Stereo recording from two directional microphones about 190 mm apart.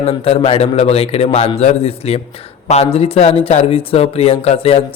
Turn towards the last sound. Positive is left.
turn(degrees=30)  # may be behind; listen again after turning